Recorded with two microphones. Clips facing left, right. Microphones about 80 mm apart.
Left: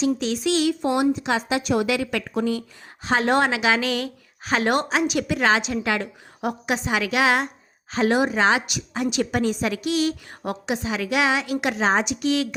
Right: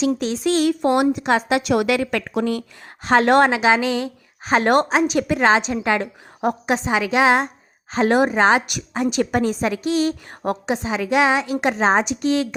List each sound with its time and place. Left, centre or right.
0.2 s a woman's voice: right
1.6 s a woman's voice: right
2.0 s a woman's voice: right
2.3 s speech: right
3.5 s a woman's voice: right